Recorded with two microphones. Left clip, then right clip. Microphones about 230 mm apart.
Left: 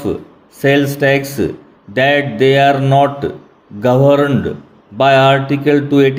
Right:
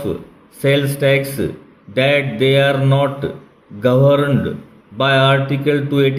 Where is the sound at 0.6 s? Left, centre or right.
Centre.